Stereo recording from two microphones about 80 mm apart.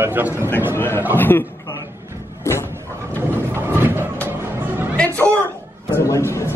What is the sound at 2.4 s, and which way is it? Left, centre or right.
Cupboard open or close, left.